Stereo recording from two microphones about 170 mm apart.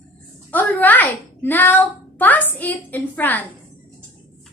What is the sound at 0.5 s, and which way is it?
A child's voice, 10° left (ahead or behind).